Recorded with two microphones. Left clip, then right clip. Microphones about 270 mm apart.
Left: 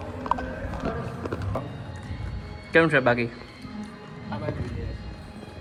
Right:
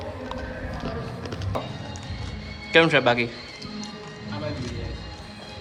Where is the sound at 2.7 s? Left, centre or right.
Centre.